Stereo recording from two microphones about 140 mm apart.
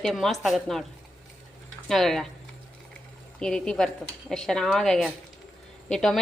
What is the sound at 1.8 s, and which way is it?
Speech, 5° left (ahead or behind).